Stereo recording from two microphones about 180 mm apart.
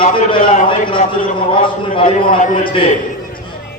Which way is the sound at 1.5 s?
30° left (ahead or behind).